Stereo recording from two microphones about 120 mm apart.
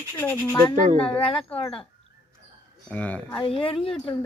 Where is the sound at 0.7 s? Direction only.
90° right.